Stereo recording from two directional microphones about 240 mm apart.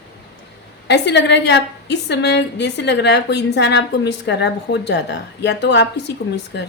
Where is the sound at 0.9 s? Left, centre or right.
Left.